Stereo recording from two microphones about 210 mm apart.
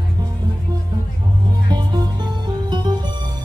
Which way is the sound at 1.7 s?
20° right (ahead or behind).